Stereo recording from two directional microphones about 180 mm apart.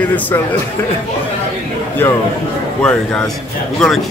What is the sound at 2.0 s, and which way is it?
Speech, 10° left (ahead or behind).